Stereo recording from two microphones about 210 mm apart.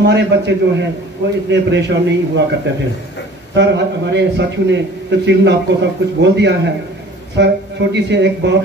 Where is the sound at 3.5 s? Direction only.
55° right (ahead or behind).